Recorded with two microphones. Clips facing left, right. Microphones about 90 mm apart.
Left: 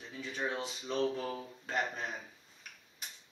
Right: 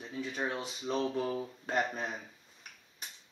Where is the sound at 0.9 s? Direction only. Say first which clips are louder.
Right 2 dB; 35° right (ahead or behind).